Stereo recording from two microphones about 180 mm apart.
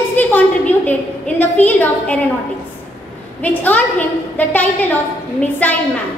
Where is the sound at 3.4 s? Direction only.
10° left (ahead or behind).